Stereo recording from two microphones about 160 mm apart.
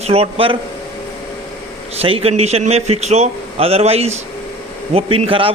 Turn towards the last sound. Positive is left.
turn(degrees=-35)  # may be behind; listen again after turning